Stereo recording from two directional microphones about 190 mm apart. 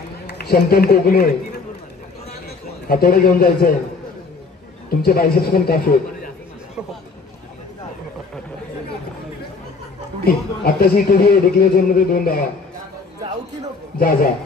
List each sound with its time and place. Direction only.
0.3 s a man's voice: 55° left (ahead or behind)
2.9 s a man's voice: 50° left (ahead or behind)
5.0 s a man's voice: 50° left (ahead or behind)
10.2 s a man's voice: 50° left (ahead or behind)
13.9 s a man's voice: 50° left (ahead or behind)